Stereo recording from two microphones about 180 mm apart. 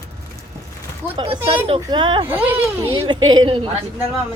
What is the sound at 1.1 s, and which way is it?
Speech, 30° right (ahead or behind).